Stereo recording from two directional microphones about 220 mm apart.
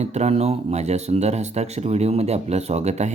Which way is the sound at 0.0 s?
30° right (ahead or behind).